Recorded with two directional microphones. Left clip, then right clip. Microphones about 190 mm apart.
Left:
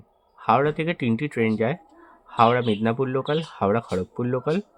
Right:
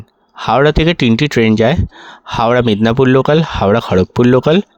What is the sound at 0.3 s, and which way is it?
Speech, 60° right (ahead or behind).